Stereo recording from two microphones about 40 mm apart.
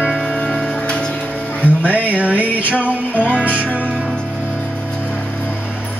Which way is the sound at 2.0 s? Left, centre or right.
Right.